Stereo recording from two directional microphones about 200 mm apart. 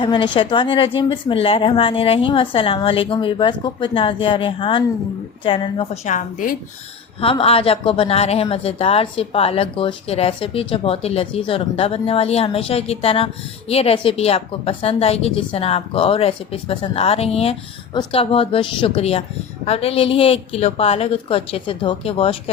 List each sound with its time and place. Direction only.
0.0 s speech: 25° left (ahead or behind)
6.1 s a woman's voice: 40° left (ahead or behind)
7.2 s speech: 30° left (ahead or behind)